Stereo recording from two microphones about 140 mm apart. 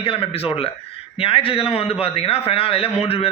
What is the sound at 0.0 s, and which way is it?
A man's voice, 40° left (ahead or behind).